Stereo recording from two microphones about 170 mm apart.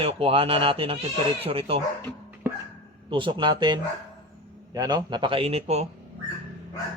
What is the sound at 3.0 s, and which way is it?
A man's voice, 30° right (ahead or behind).